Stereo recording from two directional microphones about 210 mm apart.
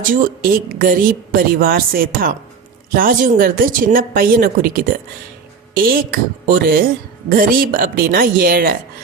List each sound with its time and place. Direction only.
0.1 s a woman's voice: 45° right (ahead or behind)